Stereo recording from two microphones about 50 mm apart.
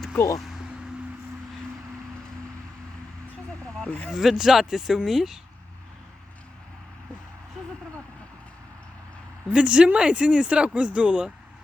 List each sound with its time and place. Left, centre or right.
3.8 s speech: left
4.1 s speech: centre
9.5 s speech: right